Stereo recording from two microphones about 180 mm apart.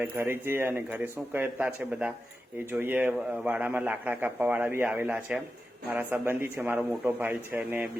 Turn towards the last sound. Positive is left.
turn(degrees=-10)  # may be behind; listen again after turning